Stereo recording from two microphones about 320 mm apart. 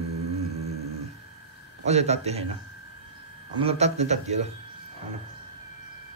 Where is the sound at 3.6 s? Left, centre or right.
Centre.